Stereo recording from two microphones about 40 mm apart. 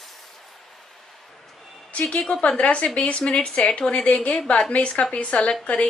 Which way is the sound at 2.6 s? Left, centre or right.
Left.